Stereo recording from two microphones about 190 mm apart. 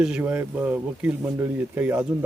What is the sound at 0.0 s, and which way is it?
Speech, 5° right (ahead or behind).